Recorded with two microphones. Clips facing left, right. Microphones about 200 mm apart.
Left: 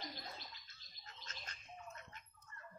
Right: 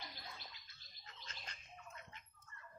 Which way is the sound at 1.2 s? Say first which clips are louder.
Left 1 dB; 45° left (ahead or behind).